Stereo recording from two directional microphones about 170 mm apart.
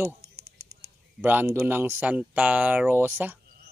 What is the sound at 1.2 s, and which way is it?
Speech, 15° right (ahead or behind).